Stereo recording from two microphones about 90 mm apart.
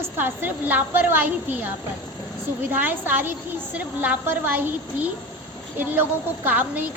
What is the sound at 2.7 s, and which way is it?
A woman's voice, 20° right (ahead or behind).